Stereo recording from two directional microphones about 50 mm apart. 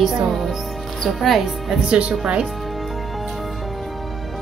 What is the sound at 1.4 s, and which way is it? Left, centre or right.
Speech, centre.